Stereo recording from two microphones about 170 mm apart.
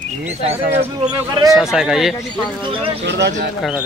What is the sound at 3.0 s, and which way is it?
Speech, 90° right.